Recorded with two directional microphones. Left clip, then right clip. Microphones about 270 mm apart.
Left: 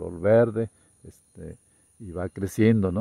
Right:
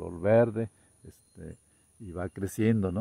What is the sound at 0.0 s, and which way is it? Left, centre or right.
Speech, left.